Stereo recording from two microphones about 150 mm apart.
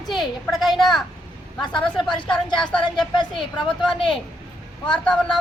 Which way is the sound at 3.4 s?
35° left (ahead or behind).